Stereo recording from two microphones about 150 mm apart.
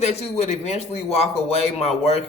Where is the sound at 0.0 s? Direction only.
45° left (ahead or behind).